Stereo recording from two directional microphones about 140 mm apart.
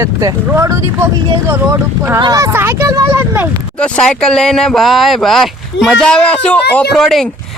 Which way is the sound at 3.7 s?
10° left (ahead or behind).